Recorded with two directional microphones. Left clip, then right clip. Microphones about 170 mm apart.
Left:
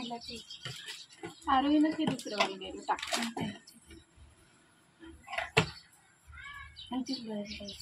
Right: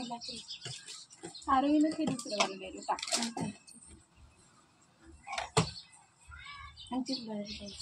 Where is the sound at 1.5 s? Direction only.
15° right (ahead or behind).